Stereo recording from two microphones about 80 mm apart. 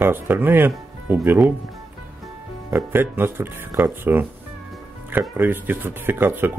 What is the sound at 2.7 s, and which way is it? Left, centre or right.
Speech, right.